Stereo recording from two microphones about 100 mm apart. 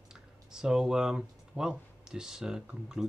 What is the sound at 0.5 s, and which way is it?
Speech, 5° right (ahead or behind).